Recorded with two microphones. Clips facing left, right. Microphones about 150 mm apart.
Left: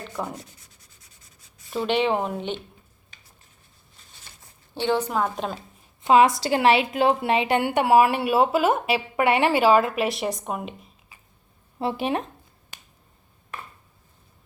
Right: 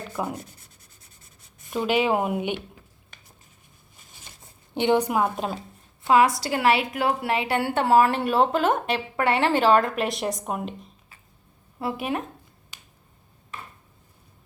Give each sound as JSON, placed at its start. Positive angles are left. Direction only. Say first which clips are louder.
{"t": 0.1, "sound": "rub", "louder": "right 2 dB", "side_deg": -5}
{"t": 1.7, "sound": "speech", "louder": "even", "side_deg": -10}
{"t": 4.7, "sound": "speech", "louder": "right 3 dB", "side_deg": -15}
{"t": 6.0, "sound": "a woman's voice", "louder": "left 2 dB", "side_deg": 20}
{"t": 11.8, "sound": "speech", "louder": "left 3 dB", "side_deg": 25}